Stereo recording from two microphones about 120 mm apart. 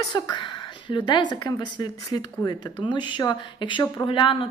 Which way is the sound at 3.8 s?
30° left (ahead or behind).